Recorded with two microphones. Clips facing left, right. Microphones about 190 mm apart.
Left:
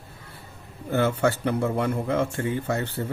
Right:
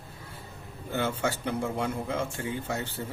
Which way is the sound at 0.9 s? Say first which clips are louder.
Left 7 dB; 65° left (ahead or behind).